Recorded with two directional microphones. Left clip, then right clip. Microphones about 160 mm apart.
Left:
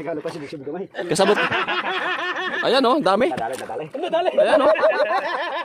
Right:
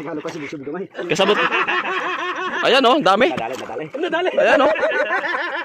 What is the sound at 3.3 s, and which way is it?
Speech, 35° right (ahead or behind).